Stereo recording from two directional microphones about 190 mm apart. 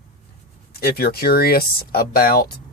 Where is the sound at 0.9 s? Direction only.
55° left (ahead or behind).